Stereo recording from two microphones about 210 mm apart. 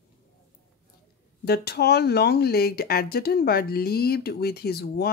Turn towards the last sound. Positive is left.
turn(degrees=50)  # may be behind; listen again after turning